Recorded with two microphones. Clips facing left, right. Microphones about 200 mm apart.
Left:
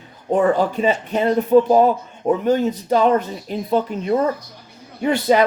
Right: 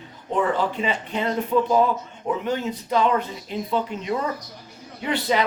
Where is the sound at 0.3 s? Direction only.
45° left (ahead or behind).